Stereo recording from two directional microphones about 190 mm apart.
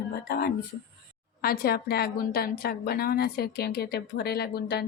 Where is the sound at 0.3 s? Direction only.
55° left (ahead or behind).